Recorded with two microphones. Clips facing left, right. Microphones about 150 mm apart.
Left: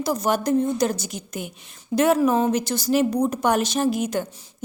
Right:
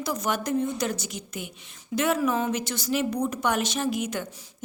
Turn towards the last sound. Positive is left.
turn(degrees=35)  # may be behind; listen again after turning